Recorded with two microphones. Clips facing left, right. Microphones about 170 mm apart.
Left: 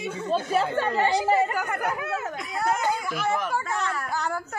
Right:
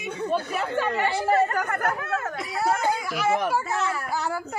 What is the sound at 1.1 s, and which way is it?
Speech, 15° left (ahead or behind).